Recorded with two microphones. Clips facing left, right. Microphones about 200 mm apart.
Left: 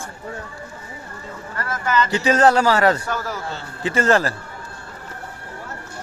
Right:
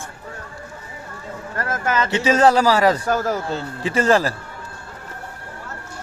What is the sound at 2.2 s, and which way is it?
Speech, 10° right (ahead or behind).